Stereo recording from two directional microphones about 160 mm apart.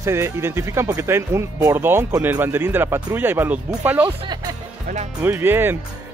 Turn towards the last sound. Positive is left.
turn(degrees=-15)  # may be behind; listen again after turning